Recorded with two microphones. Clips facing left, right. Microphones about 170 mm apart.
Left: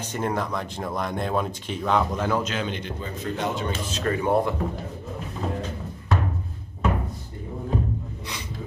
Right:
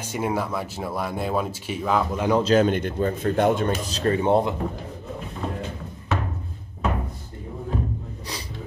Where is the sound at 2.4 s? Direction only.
40° right (ahead or behind).